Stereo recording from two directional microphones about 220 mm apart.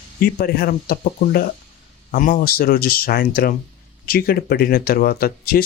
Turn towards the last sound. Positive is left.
turn(degrees=45)  # may be behind; listen again after turning